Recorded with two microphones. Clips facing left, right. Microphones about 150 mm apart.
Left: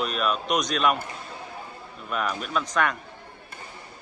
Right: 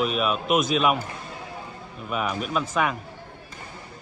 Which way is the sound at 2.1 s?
5° right (ahead or behind).